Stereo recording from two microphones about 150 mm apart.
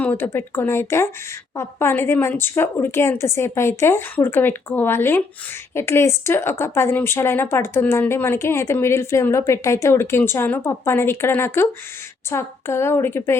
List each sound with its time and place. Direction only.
0.0 s speech: 15° left (ahead or behind)